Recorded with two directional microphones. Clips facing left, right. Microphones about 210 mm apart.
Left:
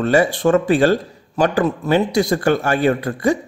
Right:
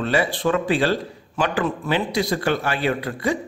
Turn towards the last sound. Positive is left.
turn(degrees=45)  # may be behind; listen again after turning